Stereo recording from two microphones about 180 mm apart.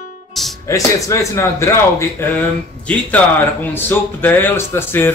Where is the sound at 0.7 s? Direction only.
15° left (ahead or behind).